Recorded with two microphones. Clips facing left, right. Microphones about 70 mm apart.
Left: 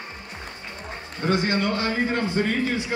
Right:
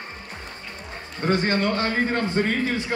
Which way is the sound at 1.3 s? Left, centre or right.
Right.